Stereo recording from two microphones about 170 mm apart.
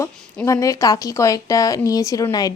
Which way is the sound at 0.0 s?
20° left (ahead or behind).